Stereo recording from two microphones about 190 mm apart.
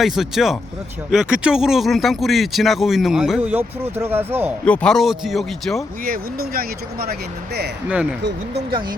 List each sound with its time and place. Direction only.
0.0 s speech: centre (ahead or behind)
4.6 s speech: 5° left (ahead or behind)
6.1 s speech: 50° right (ahead or behind)